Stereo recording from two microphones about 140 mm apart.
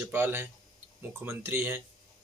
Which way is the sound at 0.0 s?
15° right (ahead or behind).